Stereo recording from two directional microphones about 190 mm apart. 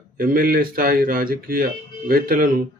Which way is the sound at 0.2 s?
45° right (ahead or behind).